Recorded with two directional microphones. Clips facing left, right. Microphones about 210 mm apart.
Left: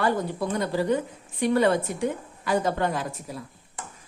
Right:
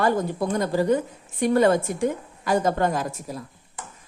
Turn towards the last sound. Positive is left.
turn(degrees=-45)  # may be behind; listen again after turning